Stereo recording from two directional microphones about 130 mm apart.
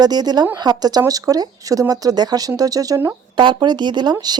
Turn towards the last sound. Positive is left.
turn(degrees=-35)  # may be behind; listen again after turning